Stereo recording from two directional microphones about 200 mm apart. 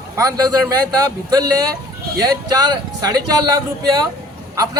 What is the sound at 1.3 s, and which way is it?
Speech, 20° right (ahead or behind).